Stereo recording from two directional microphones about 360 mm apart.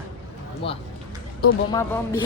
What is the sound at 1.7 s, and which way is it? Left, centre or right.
Speech, centre.